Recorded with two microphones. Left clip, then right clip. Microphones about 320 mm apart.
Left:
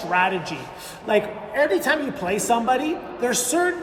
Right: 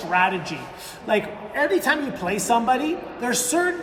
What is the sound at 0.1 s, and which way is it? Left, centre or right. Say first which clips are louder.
A woman's voice: even; centre.